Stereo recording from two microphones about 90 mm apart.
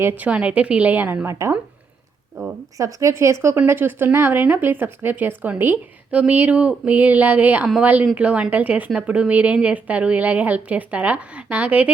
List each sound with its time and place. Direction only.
0.0 s speech: 15° right (ahead or behind); by 1.5 s 30° right (ahead or behind)
2.4 s a sound: 35° right (ahead or behind)
2.7 s a woman's voice: 40° right (ahead or behind); by 11.9 s 15° right (ahead or behind)